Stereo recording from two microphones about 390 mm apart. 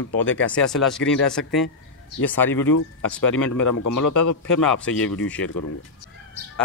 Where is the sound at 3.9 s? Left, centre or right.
Left.